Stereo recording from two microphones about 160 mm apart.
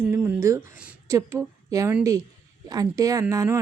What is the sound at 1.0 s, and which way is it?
A woman's voice, 20° right (ahead or behind).